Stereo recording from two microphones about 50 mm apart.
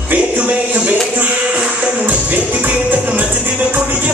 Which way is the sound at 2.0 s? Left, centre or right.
Right.